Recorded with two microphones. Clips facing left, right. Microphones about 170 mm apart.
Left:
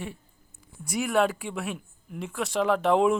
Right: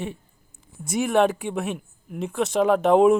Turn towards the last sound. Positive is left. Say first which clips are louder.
# right 5 dB
turn(degrees=-20)  # may be behind; listen again after turning